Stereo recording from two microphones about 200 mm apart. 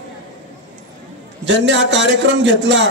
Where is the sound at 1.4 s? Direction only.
65° right (ahead or behind).